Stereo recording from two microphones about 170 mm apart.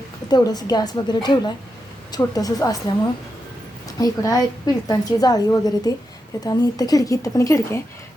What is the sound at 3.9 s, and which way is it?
A woman's voice, 20° left (ahead or behind).